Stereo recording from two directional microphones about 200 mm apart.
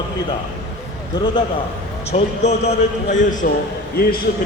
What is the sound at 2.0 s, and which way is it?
A man's voice, 35° left (ahead or behind).